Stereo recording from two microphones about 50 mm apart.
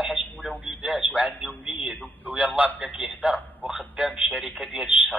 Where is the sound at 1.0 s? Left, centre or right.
Right.